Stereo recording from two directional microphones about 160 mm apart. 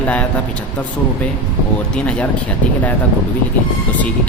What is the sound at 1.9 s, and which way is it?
Speech, 5° left (ahead or behind).